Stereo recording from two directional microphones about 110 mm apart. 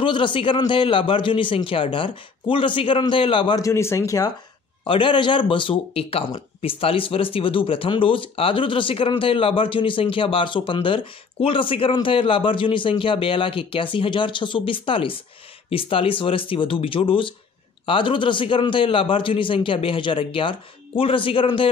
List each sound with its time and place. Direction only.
0.0 s speech: 50° left (ahead or behind)
3.5 s speech: 25° left (ahead or behind)
4.8 s speech: 50° left (ahead or behind)